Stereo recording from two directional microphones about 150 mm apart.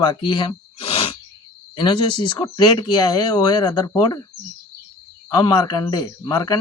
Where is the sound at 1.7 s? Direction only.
30° left (ahead or behind).